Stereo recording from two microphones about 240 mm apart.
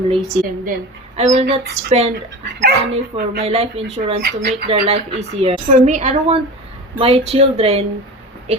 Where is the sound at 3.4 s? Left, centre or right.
Right.